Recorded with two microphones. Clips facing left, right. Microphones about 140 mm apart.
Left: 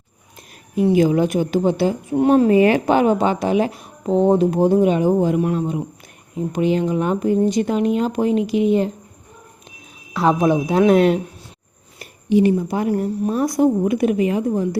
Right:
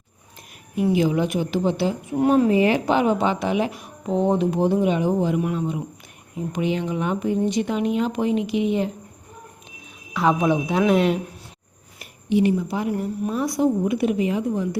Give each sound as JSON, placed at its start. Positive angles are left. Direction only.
{"t": 0.9, "sound": "speech", "side_deg": 45}
{"t": 2.1, "sound": "speech", "side_deg": 25}
{"t": 2.5, "sound": "speech", "side_deg": 55}
{"t": 10.2, "sound": "speech", "side_deg": 35}
{"t": 12.3, "sound": "speech", "side_deg": 45}
{"t": 13.0, "sound": "speech", "side_deg": 35}
{"t": 14.5, "sound": "speech", "side_deg": 40}